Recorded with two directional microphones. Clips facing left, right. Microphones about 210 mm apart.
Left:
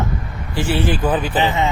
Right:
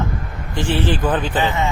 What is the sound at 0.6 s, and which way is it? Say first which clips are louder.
Speech: even; 10° left (ahead or behind).